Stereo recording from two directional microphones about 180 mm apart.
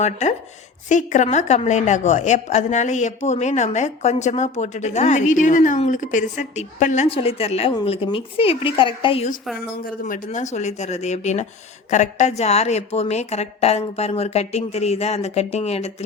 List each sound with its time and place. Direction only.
0.0 s a woman's voice: 40° left (ahead or behind)
9.6 s a woman's voice: 50° left (ahead or behind); by 16.0 s 35° left (ahead or behind)